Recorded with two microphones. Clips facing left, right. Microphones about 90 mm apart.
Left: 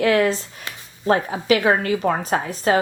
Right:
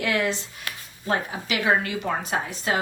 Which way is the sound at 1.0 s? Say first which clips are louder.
Left 8 dB; 45° left (ahead or behind).